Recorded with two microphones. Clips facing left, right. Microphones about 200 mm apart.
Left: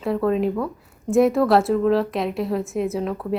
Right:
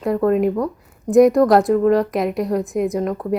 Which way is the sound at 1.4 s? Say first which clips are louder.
Right 4 dB; 5° left (ahead or behind).